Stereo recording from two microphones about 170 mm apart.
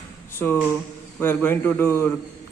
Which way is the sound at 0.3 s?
10° left (ahead or behind).